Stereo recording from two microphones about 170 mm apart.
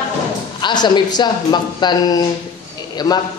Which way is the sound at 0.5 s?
25° left (ahead or behind).